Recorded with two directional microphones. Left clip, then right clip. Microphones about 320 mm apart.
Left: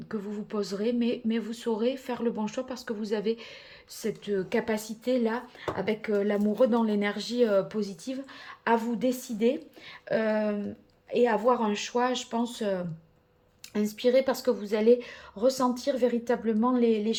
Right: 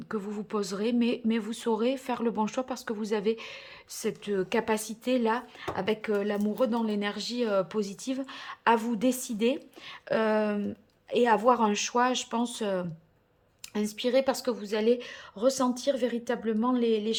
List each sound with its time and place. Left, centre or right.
0.1 s a woman's voice: centre